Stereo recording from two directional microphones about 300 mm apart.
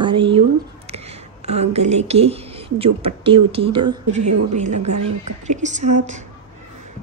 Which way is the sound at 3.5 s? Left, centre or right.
Centre.